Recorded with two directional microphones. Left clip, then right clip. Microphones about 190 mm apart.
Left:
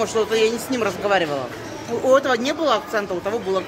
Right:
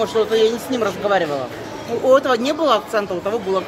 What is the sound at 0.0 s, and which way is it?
Speech, 5° left (ahead or behind).